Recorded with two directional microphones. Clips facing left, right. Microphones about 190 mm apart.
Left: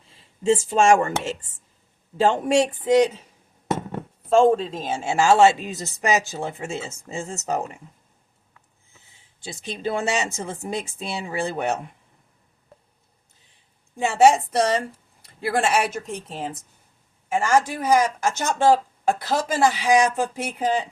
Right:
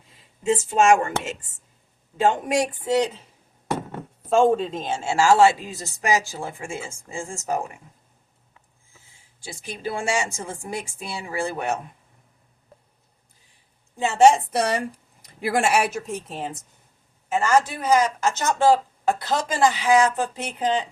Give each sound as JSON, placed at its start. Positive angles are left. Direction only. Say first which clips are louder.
{"t": 0.4, "sound": "a woman's voice", "louder": "left 1 dB", "side_deg": 30}
{"t": 4.3, "sound": "a woman's voice", "louder": "left 1 dB", "side_deg": 0}
{"t": 8.9, "sound": "a woman's voice", "louder": "right 1 dB", "side_deg": 20}
{"t": 13.9, "sound": "speech", "louder": "even", "side_deg": 10}
{"t": 17.2, "sound": "speech", "louder": "even", "side_deg": 10}